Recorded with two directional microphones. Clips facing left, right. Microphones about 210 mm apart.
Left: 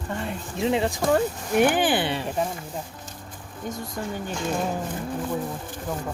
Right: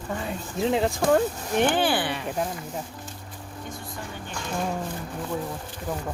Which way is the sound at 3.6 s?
40° left (ahead or behind).